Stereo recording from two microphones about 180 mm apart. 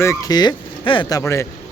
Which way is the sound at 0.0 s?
20° left (ahead or behind).